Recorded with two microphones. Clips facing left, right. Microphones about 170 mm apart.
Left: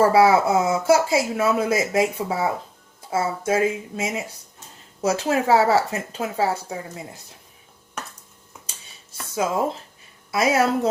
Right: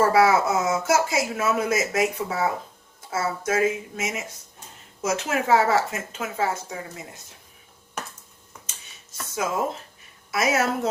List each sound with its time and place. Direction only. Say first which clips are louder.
0.0 s speech: left 3 dB; 30° left (ahead or behind)
9.1 s speech: left 3 dB; 30° left (ahead or behind)